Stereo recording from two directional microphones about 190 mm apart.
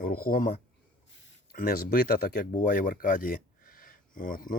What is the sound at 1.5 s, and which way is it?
Speech, 50° left (ahead or behind).